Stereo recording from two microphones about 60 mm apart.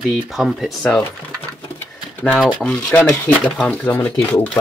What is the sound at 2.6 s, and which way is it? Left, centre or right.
Speech, centre.